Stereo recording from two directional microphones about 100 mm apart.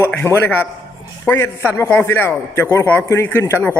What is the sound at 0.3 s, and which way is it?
Speech, 25° left (ahead or behind).